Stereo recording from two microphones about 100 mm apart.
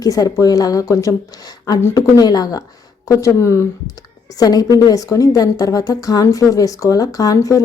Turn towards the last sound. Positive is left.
turn(degrees=35)  # may be behind; listen again after turning